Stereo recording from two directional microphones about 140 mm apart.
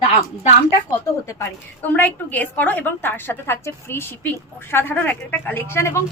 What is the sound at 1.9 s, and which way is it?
A woman's voice, 10° left (ahead or behind).